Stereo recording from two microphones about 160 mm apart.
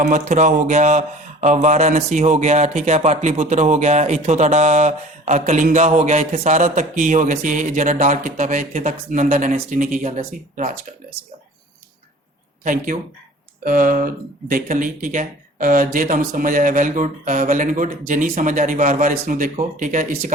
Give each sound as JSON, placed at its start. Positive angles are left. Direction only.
{"t": 0.0, "sound": "speech", "side_deg": -50}
{"t": 12.6, "sound": "speech", "side_deg": -55}